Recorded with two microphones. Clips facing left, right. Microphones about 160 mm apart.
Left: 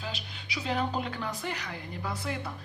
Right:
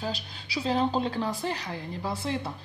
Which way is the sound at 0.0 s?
35° right (ahead or behind).